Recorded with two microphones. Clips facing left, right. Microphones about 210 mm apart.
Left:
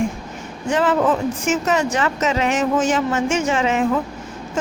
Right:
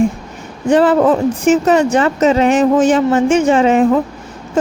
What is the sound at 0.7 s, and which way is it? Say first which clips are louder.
Speech: right 7 dB; 35° right (ahead or behind).